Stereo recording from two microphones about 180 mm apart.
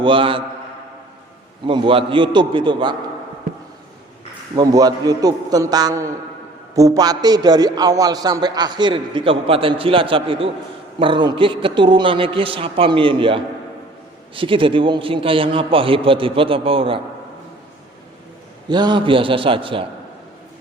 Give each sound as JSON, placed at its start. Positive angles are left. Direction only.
{"t": 0.0, "sound": "a man's voice", "side_deg": -30}
{"t": 1.6, "sound": "a man's voice", "side_deg": -30}
{"t": 4.5, "sound": "a man's voice", "side_deg": -20}
{"t": 18.7, "sound": "a man's voice", "side_deg": -25}